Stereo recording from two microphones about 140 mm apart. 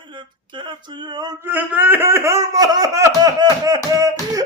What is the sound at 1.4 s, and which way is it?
Speech, 15° right (ahead or behind).